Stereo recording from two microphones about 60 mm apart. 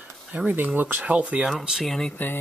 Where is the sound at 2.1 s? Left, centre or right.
Left.